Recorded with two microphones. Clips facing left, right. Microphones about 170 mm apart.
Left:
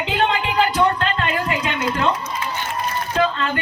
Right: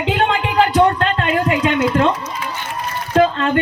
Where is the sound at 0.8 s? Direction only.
55° right (ahead or behind).